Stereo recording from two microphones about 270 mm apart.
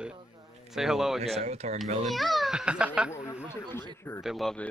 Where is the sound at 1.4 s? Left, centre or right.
Right.